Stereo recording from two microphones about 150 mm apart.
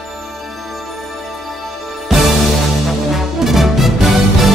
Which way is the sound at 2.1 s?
Centre (ahead or behind).